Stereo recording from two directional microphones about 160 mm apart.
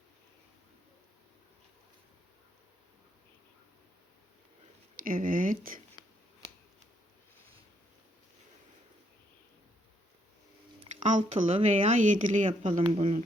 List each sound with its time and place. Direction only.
4.9 s speech: 60° right (ahead or behind)
11.1 s a woman's voice: 50° right (ahead or behind)